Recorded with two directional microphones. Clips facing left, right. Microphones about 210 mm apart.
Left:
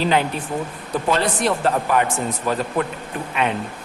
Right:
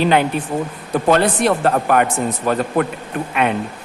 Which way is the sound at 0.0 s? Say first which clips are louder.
Right 4 dB; 60° right (ahead or behind).